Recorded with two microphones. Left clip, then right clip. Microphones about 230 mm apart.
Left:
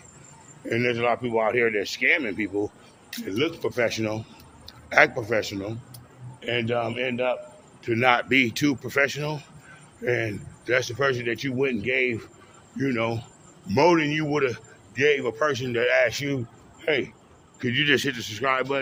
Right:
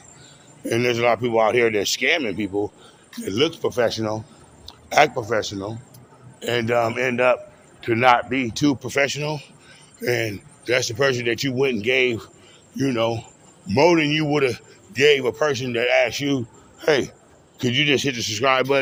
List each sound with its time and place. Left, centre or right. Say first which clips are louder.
0.6 s a man's voice: right 4 dB; right; by 5.7 s centre
6.4 s a man's voice: right 5 dB; right
7.8 s a man's voice: right 5 dB; centre
8.2 s speech: left 3 dB; centre
8.5 s speech: right 3 dB; centre
10.0 s a man's voice: right 3 dB; right
18.2 s a man's voice: right 6 dB; right